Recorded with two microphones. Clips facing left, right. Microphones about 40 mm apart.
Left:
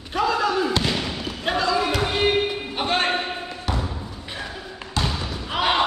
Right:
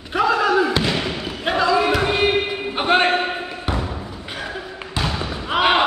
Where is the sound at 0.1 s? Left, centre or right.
Centre.